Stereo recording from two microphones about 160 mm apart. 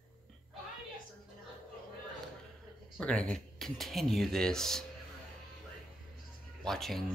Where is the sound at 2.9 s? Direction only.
5° left (ahead or behind).